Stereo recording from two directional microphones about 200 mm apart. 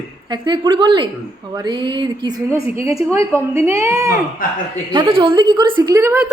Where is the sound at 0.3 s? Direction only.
20° right (ahead or behind).